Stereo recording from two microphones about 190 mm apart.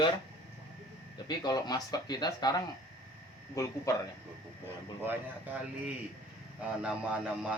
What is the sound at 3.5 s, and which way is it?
Speech, 15° left (ahead or behind).